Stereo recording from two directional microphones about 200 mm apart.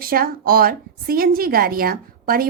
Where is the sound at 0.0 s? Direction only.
45° right (ahead or behind).